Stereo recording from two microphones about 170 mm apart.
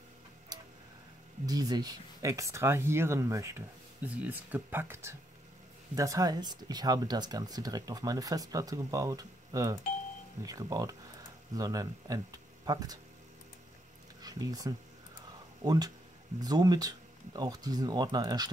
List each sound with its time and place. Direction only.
1.4 s speech: 20° right (ahead or behind)
14.2 s speech: 20° right (ahead or behind)